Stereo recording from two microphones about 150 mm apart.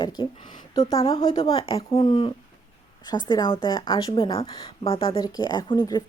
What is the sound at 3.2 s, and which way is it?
A woman's voice, 25° left (ahead or behind).